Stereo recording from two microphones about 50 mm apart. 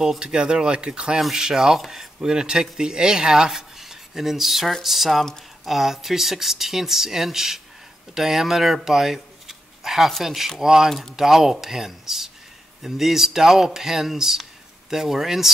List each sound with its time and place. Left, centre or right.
0.0 s speech: centre
10.9 s speech: centre